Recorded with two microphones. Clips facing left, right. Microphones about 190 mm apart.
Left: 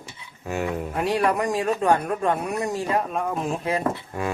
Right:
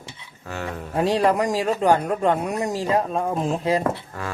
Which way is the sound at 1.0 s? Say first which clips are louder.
Right 4 dB; 30° right (ahead or behind).